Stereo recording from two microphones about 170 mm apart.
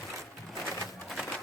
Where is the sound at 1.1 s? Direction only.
Centre (ahead or behind).